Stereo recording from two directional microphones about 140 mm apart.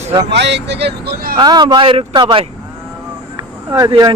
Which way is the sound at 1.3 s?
30° right (ahead or behind).